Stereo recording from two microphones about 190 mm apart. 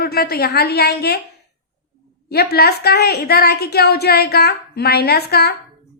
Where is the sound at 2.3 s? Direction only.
55° left (ahead or behind).